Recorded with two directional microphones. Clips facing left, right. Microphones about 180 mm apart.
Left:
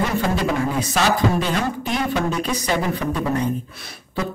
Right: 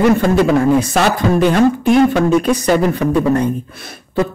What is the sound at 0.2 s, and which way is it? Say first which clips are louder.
A woman's voice: right 9 dB; 50° right (ahead or behind).